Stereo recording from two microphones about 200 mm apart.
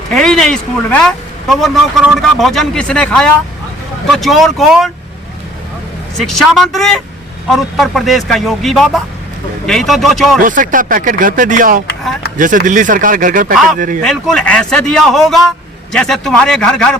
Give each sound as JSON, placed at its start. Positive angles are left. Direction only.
{"t": 0.1, "sound": "a man's voice", "side_deg": 5}
{"t": 6.1, "sound": "a man's voice", "side_deg": 0}
{"t": 10.4, "sound": "speech", "side_deg": -40}
{"t": 14.0, "sound": "a man's voice", "side_deg": 5}